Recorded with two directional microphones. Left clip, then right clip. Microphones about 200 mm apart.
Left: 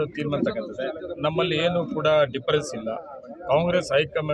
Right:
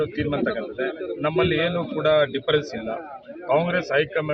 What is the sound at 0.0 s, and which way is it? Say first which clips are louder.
Speech: right 1 dB; 25° left (ahead or behind).